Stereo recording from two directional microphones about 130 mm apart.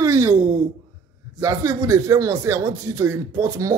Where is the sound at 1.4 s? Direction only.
25° right (ahead or behind).